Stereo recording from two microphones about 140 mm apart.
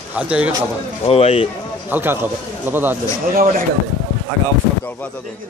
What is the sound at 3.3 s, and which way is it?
Speech, 80° right.